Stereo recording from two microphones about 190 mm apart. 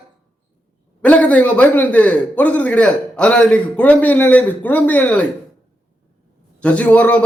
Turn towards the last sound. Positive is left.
turn(degrees=5)  # may be behind; listen again after turning